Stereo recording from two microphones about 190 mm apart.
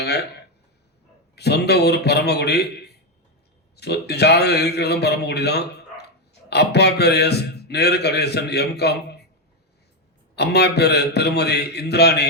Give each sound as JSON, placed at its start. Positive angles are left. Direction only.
{"t": 0.0, "sound": "speech", "side_deg": 60}
{"t": 1.4, "sound": "a man's voice", "side_deg": 60}
{"t": 10.3, "sound": "a man's voice", "side_deg": 60}